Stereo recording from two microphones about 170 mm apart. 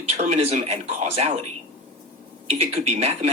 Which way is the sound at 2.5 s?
40° right (ahead or behind).